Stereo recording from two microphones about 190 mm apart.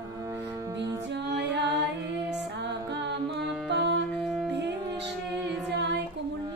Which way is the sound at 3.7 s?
65° right (ahead or behind).